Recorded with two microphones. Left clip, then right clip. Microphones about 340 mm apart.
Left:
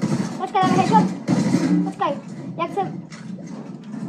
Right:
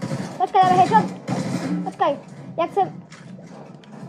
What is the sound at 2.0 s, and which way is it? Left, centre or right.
Children playing, right.